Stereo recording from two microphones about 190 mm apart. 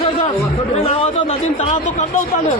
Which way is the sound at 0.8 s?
30° left (ahead or behind).